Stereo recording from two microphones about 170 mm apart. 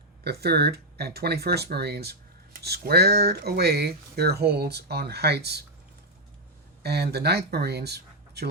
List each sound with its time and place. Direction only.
0.3 s speech: 70° right (ahead or behind)
6.8 s speech: 70° right (ahead or behind)